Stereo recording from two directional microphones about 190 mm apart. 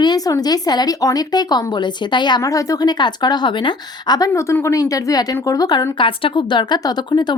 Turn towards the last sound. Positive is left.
turn(degrees=25)  # may be behind; listen again after turning